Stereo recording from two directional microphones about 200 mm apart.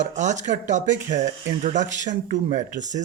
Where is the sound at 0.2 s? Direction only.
40° right (ahead or behind).